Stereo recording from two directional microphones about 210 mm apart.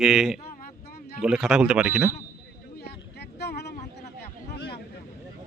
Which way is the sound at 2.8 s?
50° left (ahead or behind).